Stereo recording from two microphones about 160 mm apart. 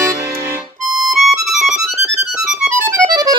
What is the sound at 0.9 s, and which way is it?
Music, centre (ahead or behind).